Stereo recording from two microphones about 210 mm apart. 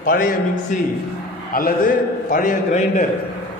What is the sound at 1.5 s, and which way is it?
A man's voice, 45° left (ahead or behind).